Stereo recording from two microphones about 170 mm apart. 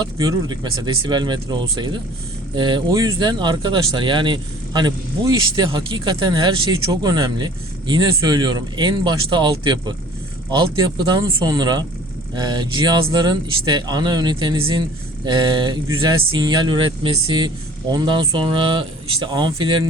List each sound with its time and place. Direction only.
0.0 s speech: 25° right (ahead or behind)